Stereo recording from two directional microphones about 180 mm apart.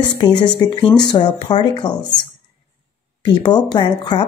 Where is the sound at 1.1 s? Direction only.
25° left (ahead or behind).